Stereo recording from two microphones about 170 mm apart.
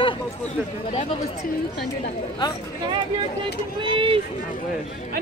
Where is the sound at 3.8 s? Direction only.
30° right (ahead or behind).